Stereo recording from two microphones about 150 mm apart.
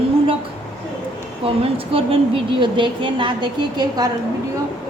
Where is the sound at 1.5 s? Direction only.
40° right (ahead or behind).